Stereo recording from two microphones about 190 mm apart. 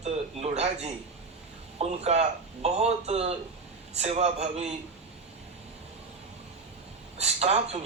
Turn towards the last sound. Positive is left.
turn(degrees=-35)  # may be behind; listen again after turning